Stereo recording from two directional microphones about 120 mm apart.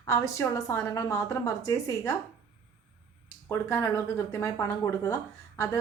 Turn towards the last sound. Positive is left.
turn(degrees=25)  # may be behind; listen again after turning